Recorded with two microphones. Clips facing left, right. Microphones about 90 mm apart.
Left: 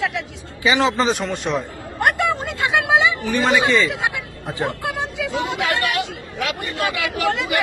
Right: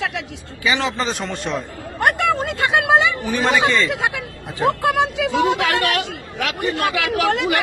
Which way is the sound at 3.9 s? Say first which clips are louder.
Right 2 dB; 60° right (ahead or behind).